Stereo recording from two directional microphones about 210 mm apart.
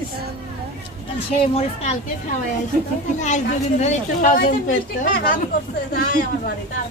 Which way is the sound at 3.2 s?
35° left (ahead or behind).